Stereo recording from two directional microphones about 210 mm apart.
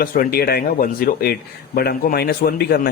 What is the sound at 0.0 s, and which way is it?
Speech, 45° left (ahead or behind).